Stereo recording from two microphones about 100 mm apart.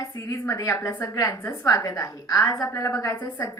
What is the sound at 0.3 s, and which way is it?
A woman's voice, 35° left (ahead or behind).